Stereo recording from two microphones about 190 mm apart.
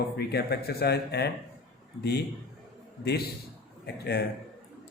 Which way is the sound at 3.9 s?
60° left (ahead or behind).